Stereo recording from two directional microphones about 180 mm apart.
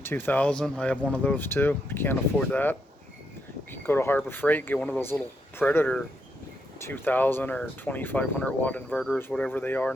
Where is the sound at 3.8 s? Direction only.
10° left (ahead or behind).